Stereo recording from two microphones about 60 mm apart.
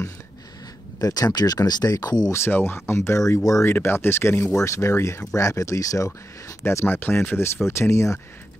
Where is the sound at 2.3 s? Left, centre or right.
Left.